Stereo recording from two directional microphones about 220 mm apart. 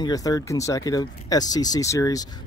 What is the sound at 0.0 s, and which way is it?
Speech, 15° left (ahead or behind).